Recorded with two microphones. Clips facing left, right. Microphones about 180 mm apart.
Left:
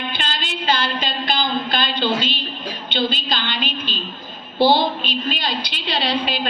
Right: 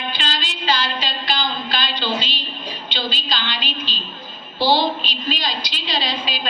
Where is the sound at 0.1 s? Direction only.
55° left (ahead or behind).